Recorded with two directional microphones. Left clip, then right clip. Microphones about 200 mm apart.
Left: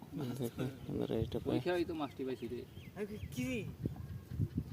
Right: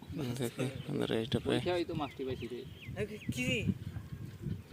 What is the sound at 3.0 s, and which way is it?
Speech, 60° left (ahead or behind).